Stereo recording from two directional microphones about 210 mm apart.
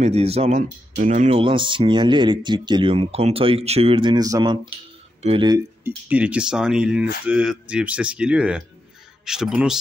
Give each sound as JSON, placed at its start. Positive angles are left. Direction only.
{"t": 0.0, "sound": "speech", "side_deg": -30}
{"t": 5.9, "sound": "speech", "side_deg": -5}